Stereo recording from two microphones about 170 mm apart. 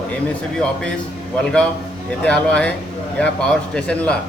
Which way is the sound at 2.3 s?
5° left (ahead or behind).